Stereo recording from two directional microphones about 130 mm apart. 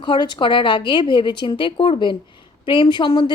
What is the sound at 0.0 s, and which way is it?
A woman's voice, 35° left (ahead or behind).